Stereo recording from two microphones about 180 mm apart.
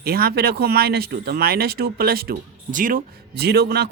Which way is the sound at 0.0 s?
60° right (ahead or behind).